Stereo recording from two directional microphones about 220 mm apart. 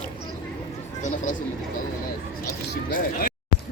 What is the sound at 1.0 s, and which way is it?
Speech, 35° left (ahead or behind).